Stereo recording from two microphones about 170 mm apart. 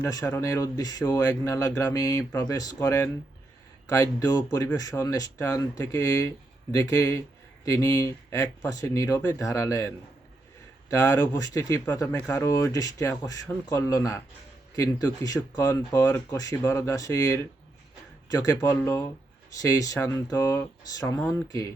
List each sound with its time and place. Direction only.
0.0 s speech: 15° left (ahead or behind)
21.2 s speech: 10° left (ahead or behind)